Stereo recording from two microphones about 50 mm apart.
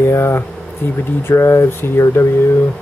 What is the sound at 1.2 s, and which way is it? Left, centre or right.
Speech, left.